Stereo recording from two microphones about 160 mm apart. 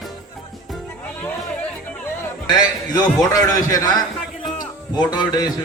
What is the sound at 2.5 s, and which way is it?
A man's voice, 25° left (ahead or behind).